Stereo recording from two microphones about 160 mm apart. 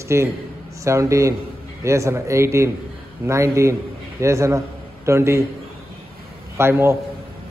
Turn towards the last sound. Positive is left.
turn(degrees=-15)  # may be behind; listen again after turning